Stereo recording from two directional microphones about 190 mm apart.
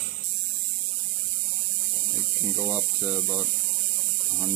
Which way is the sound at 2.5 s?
10° right (ahead or behind).